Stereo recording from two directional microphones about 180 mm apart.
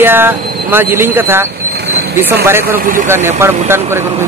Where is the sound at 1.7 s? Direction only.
65° right (ahead or behind).